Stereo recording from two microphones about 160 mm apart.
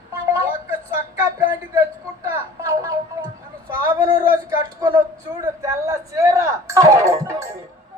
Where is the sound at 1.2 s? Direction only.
20° right (ahead or behind).